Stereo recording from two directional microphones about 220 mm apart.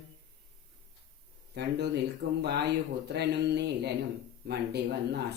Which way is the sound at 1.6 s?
50° right (ahead or behind).